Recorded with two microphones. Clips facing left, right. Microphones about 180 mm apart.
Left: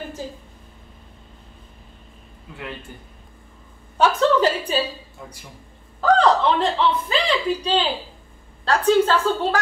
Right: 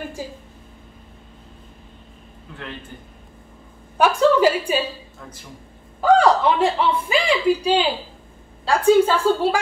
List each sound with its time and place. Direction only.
4.0 s a woman's voice: 10° right (ahead or behind)
5.9 s speech: 10° right (ahead or behind)